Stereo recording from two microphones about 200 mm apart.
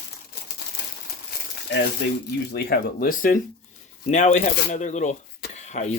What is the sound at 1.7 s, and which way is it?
Speech, 60° left (ahead or behind).